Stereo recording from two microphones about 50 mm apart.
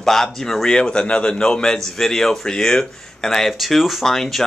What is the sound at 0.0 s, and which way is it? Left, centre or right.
A man's voice, centre.